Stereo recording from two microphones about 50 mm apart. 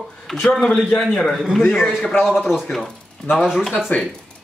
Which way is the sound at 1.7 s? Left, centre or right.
Centre.